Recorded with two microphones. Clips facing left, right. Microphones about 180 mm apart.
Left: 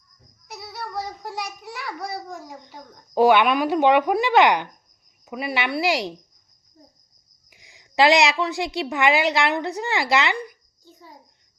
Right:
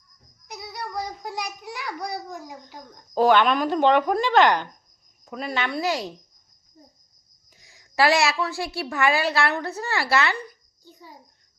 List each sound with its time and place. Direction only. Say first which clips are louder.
0.4 s a child's voice: even; centre (ahead or behind)
3.2 s a woman's voice: left 2 dB; 10° left (ahead or behind)
7.5 s a woman's voice: left 3 dB; 15° left (ahead or behind)
10.8 s a sound: even; centre (ahead or behind)